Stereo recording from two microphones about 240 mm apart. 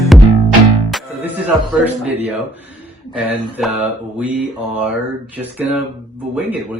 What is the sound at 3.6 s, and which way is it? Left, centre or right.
Music, centre.